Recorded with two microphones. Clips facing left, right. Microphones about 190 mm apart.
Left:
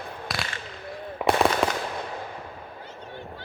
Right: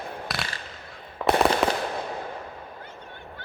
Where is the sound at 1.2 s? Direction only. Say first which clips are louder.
Even; 15° left (ahead or behind).